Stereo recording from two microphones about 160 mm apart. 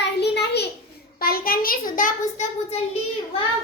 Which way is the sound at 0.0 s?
90° left.